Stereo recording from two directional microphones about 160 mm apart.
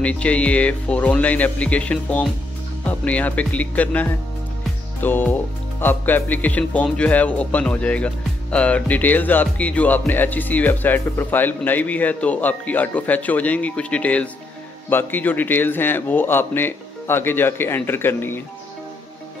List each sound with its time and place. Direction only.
0.0 s speech: 10° left (ahead or behind)